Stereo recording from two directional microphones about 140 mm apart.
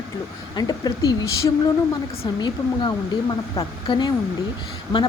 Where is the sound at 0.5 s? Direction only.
30° left (ahead or behind).